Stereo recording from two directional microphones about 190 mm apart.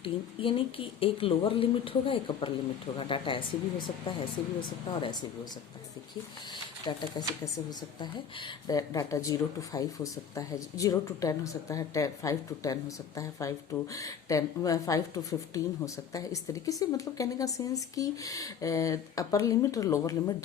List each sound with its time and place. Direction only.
0.0 s speech: 30° left (ahead or behind)
6.5 s a woman's voice: 20° left (ahead or behind)